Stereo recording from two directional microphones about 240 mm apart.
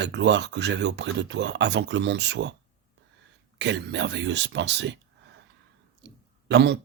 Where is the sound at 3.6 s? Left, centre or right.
Right.